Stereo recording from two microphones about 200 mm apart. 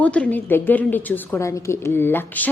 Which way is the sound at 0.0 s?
5° left (ahead or behind).